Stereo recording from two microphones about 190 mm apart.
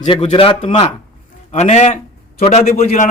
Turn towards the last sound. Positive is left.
turn(degrees=45)  # may be behind; listen again after turning